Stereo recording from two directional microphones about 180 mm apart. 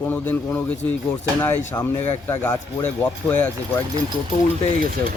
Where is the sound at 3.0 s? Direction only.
10° left (ahead or behind).